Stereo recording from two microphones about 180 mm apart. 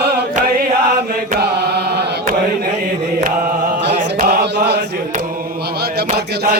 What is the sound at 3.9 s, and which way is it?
Chant, 50° right (ahead or behind).